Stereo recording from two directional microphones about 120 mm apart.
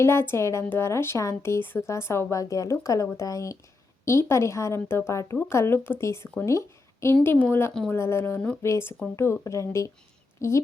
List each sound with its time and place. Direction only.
0.0 s a woman's voice: 20° left (ahead or behind)